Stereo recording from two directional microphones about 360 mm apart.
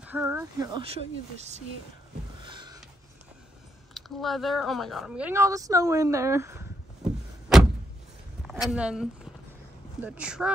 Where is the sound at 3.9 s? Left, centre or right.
Centre.